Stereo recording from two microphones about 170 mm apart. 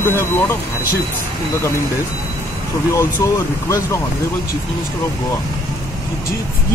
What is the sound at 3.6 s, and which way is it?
Speech, 20° left (ahead or behind).